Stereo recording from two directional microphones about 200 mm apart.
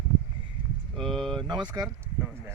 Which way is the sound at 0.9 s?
Centre (ahead or behind).